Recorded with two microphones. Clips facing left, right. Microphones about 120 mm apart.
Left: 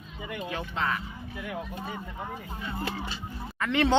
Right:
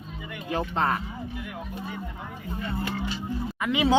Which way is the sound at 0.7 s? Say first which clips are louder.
Right 4 dB; 40° right (ahead or behind).